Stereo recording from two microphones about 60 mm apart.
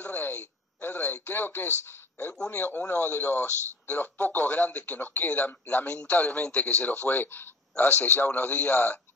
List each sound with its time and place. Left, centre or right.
0.0 s a man's voice: left